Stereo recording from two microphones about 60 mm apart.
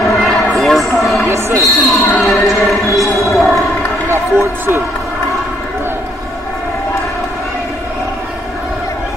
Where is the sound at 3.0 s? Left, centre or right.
Centre.